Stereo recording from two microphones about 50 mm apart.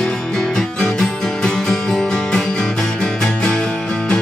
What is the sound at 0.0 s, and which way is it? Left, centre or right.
Music, centre.